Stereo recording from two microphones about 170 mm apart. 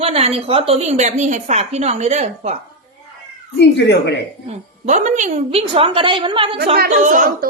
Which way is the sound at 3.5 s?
80° left.